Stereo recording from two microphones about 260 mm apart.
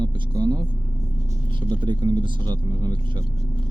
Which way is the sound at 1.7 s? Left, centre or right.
Centre.